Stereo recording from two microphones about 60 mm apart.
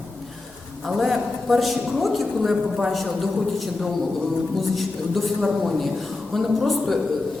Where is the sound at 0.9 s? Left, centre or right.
Centre.